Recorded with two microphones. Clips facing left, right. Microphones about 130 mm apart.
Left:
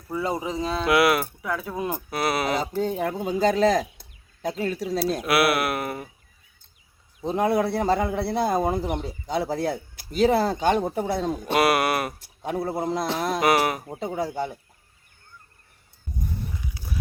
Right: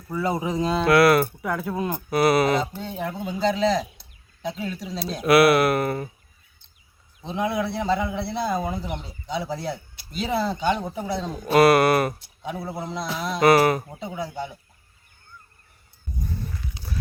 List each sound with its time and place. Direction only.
0.3 s speech: 5° right (ahead or behind)
0.9 s speech: 15° left (ahead or behind)
1.4 s speech: centre (ahead or behind)
2.7 s a man's voice: 45° left (ahead or behind)
4.9 s speech: 5° left (ahead or behind)
7.3 s a man's voice: 45° left (ahead or behind)
11.5 s speech: 10° left (ahead or behind)
12.2 s a man's voice: 50° left (ahead or behind)
13.4 s speech: 10° left (ahead or behind)
13.9 s a man's voice: 50° left (ahead or behind)
16.2 s a sound: 15° left (ahead or behind)